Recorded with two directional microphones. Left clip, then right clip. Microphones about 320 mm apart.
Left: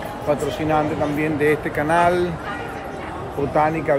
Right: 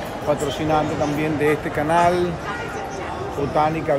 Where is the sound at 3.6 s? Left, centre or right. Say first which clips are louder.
Left 1 dB; centre.